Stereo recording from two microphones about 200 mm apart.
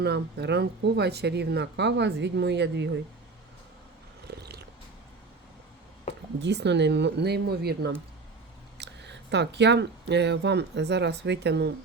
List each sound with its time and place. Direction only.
0.0 s speech: 55° right (ahead or behind)
4.3 s purr: 55° right (ahead or behind)
6.4 s speech: 60° right (ahead or behind)